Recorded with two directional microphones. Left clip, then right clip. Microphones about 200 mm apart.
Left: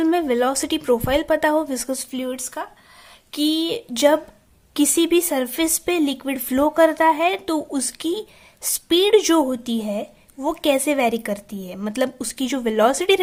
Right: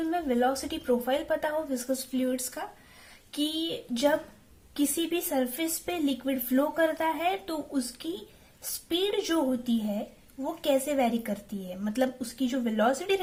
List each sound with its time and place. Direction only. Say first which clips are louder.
0.0 s a woman's voice: left 8 dB; 45° left (ahead or behind)